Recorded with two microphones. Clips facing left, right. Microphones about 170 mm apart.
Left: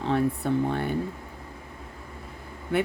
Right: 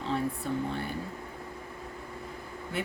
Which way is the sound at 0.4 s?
65° left (ahead or behind).